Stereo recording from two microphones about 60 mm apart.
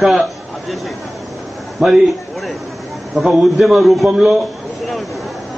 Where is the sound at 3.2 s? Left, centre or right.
Centre.